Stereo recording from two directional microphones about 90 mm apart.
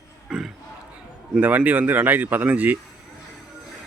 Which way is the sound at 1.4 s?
20° right (ahead or behind).